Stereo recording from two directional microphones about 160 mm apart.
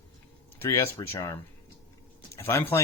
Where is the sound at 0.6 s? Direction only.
15° left (ahead or behind).